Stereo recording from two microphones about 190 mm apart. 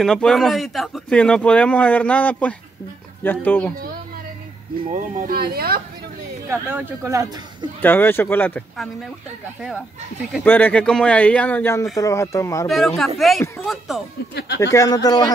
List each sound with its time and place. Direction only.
0.0 s a man's voice: centre (ahead or behind)
4.9 s speech: 45° right (ahead or behind)
6.5 s speech: 10° right (ahead or behind)
7.8 s speech: 10° left (ahead or behind)
9.6 s a man's voice: 5° right (ahead or behind)
10.3 s speech: 10° left (ahead or behind)
12.6 s a man's voice: centre (ahead or behind)
14.6 s speech: 15° left (ahead or behind)